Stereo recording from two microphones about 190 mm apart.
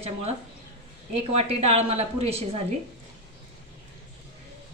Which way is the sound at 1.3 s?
30° right (ahead or behind).